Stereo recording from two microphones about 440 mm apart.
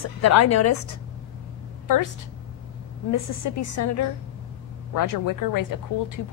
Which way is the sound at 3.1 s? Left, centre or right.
Left.